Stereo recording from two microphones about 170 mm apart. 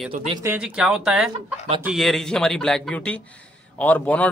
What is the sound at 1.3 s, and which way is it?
Speech, 30° right (ahead or behind).